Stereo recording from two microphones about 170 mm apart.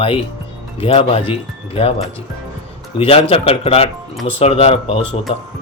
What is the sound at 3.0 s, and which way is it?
Speech, 35° left (ahead or behind).